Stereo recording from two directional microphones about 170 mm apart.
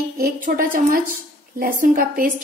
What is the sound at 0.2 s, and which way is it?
A woman's voice, 55° right (ahead or behind).